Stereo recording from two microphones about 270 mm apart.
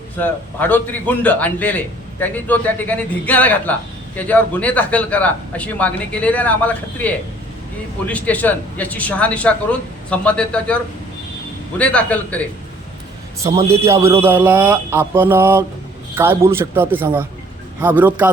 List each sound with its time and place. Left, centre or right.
0.2 s a man's voice: centre
11.8 s a man's voice: centre
13.4 s a man's voice: centre